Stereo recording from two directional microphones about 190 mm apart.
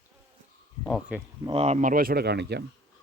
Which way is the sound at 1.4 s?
35° right (ahead or behind).